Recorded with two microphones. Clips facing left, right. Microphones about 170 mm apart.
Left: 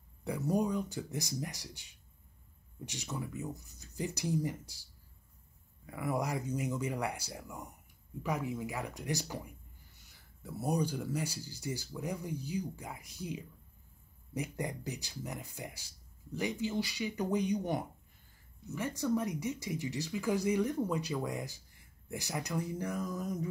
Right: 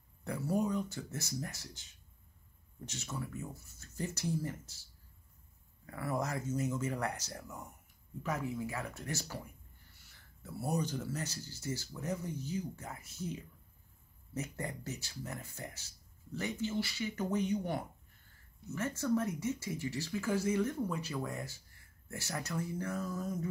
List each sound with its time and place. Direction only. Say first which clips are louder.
0.2 s speech: left 2 dB; 15° left (ahead or behind)
5.9 s speech: left 2 dB; 15° left (ahead or behind)